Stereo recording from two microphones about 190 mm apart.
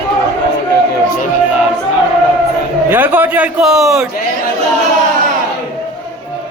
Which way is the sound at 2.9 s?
10° right (ahead or behind).